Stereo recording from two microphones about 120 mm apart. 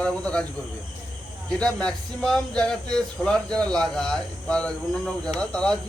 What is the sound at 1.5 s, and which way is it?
Speech, 5° left (ahead or behind).